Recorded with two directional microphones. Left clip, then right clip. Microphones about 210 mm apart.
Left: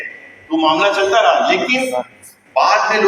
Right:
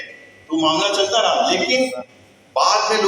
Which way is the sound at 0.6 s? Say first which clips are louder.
Left 4 dB; 60° right (ahead or behind).